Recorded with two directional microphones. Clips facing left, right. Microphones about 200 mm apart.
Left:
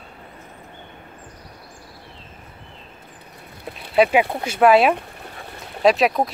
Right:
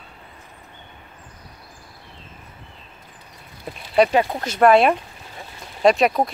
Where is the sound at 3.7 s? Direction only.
5° left (ahead or behind).